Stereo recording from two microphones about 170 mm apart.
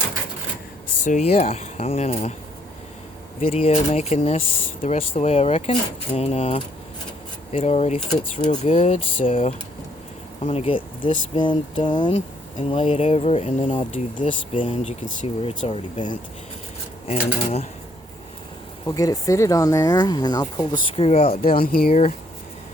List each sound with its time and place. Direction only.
1.0 s speech: 40° left (ahead or behind)
3.4 s speech: 35° left (ahead or behind)
12.1 s speech: 40° left (ahead or behind)
17.1 s speech: 40° left (ahead or behind)
18.9 s speech: 20° left (ahead or behind)
20.9 s speech: 35° left (ahead or behind)
21.4 s speech: 60° left (ahead or behind)